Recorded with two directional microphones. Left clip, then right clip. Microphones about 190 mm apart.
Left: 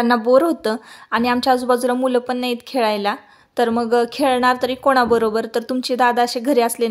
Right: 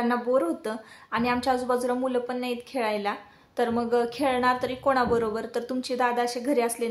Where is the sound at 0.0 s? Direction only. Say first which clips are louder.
Left 10 dB; 50° left (ahead or behind).